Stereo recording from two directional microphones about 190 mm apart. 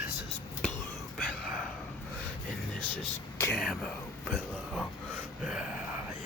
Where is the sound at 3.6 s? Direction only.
5° left (ahead or behind).